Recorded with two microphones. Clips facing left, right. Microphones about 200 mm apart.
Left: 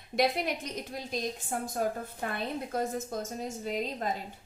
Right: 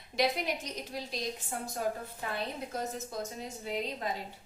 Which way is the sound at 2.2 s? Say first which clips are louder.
Left 3 dB; 55° left (ahead or behind).